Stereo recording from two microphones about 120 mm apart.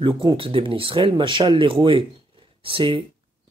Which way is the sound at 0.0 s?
40° right (ahead or behind).